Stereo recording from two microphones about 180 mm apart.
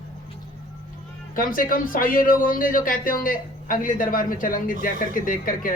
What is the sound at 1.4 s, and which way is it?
Speech, 50° left (ahead or behind).